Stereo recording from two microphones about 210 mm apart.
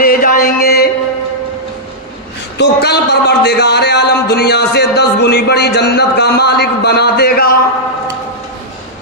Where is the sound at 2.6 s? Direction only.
55° left (ahead or behind).